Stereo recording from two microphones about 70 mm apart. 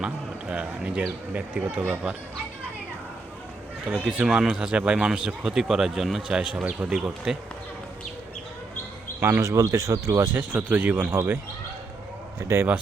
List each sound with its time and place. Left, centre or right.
0.0 s a man's voice: centre
3.8 s speech: centre
9.4 s speech: right
10.3 s speech: right
12.5 s speech: right